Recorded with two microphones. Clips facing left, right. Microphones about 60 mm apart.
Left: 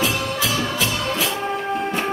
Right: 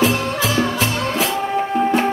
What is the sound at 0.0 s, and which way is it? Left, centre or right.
Music, right.